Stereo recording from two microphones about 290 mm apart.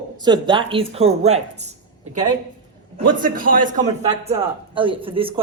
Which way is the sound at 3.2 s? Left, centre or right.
Right.